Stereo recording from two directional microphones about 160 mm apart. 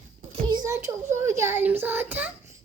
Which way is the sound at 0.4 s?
25° right (ahead or behind).